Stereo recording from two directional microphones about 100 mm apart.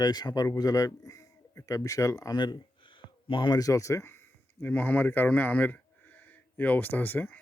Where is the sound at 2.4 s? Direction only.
50° left (ahead or behind).